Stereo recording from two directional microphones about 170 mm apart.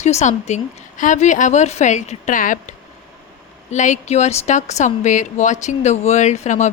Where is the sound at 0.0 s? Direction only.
40° left (ahead or behind).